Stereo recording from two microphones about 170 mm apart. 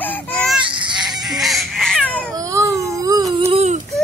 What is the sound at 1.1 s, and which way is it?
Baby cry, centre (ahead or behind).